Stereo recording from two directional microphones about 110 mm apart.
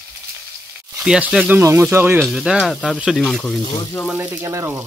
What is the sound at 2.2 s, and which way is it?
Speech, 5° right (ahead or behind).